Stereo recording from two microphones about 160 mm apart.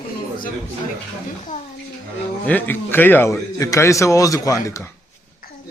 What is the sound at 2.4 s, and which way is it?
A man's voice, 10° left (ahead or behind).